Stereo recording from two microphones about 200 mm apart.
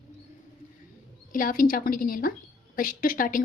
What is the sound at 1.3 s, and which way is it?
A woman's voice, 45° left (ahead or behind).